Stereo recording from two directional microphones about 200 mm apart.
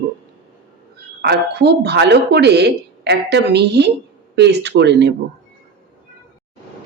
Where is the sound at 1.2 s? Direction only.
55° right (ahead or behind).